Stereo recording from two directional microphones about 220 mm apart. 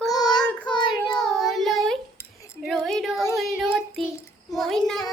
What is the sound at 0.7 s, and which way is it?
Child singing, 20° left (ahead or behind).